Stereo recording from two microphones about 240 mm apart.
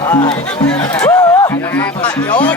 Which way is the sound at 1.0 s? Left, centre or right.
Centre.